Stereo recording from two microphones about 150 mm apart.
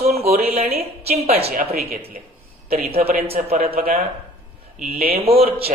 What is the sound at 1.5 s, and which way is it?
Speech, 90° right.